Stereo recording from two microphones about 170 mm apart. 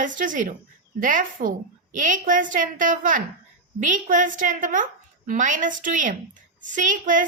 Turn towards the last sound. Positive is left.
turn(degrees=-50)  # may be behind; listen again after turning